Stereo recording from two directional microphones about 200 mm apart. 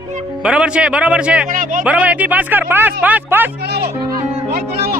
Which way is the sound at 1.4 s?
40° right (ahead or behind).